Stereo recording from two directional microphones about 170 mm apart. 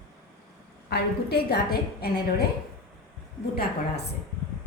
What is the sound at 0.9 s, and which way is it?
A woman's voice, 70° left (ahead or behind).